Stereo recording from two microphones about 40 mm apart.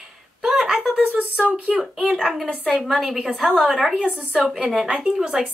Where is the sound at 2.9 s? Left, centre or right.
Centre.